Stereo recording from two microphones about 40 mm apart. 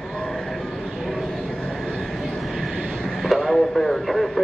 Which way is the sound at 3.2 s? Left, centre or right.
Centre.